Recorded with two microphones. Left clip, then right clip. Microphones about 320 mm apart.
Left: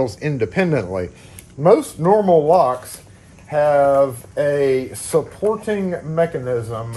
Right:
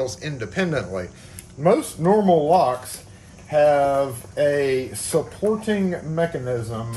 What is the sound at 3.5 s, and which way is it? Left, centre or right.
Speech, centre.